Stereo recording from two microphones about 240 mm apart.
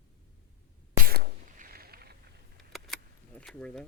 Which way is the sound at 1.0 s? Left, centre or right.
Right.